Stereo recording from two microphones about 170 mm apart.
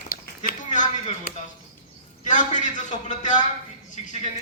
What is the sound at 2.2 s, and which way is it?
Speech, 45° left (ahead or behind).